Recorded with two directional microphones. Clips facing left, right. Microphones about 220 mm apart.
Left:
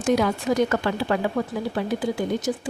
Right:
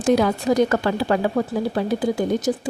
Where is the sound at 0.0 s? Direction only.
35° right (ahead or behind).